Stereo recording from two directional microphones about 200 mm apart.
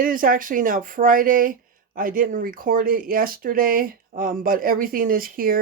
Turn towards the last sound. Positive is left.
turn(degrees=-45)  # may be behind; listen again after turning